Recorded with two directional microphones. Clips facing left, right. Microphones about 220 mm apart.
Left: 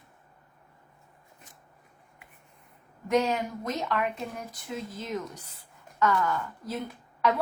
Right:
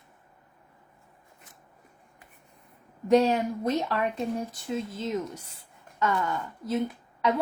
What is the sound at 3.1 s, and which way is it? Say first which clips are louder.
A woman's voice: right 5 dB; 35° right (ahead or behind).